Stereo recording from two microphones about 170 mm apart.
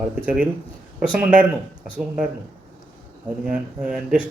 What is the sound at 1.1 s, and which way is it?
Speech, 10° right (ahead or behind).